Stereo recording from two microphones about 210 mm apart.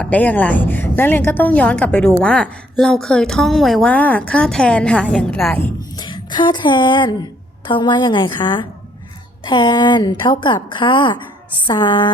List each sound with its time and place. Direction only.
0.0 s a woman's voice: 5° left (ahead or behind)
6.0 s a woman's voice: 20° left (ahead or behind)